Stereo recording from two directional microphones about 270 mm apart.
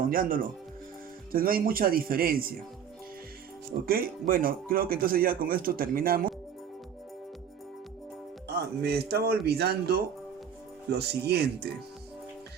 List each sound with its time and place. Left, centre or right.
0.1 s speech: right
3.8 s speech: right
8.4 s speech: right